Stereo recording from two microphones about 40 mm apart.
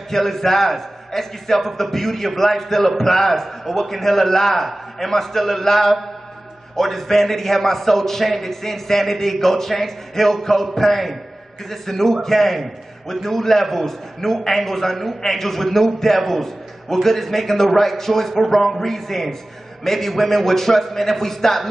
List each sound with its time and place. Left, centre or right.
0.1 s a man's voice: centre